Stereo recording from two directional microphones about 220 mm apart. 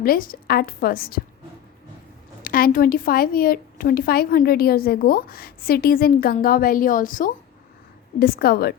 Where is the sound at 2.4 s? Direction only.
40° left (ahead or behind).